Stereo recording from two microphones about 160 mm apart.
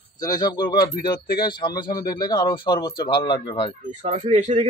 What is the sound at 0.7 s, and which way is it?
Speech, 70° left (ahead or behind).